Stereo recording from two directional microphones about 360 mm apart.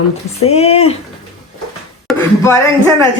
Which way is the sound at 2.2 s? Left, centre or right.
Centre.